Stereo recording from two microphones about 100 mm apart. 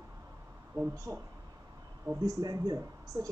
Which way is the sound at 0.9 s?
30° right (ahead or behind).